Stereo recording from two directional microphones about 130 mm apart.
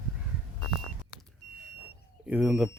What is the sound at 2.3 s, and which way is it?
Speech, 10° right (ahead or behind).